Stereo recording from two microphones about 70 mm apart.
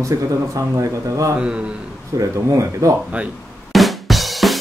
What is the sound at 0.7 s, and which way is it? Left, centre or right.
Speech, right.